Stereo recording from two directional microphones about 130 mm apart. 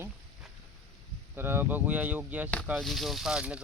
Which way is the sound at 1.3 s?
15° right (ahead or behind).